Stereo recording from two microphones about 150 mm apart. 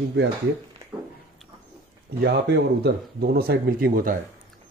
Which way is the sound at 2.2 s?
90° right.